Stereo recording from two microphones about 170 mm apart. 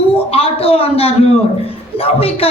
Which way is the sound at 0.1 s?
35° left (ahead or behind).